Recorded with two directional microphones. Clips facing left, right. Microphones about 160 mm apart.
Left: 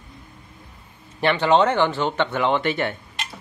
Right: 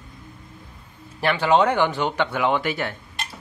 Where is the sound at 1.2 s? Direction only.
10° right (ahead or behind).